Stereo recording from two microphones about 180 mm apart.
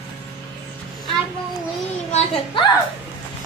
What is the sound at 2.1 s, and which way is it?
Speech, 35° left (ahead or behind).